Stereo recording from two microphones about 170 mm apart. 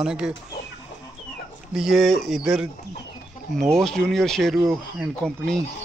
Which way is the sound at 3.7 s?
5° left (ahead or behind).